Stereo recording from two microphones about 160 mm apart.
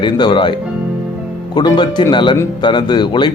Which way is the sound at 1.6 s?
30° left (ahead or behind).